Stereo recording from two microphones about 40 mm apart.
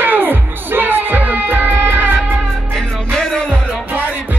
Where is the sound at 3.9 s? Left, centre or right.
Right.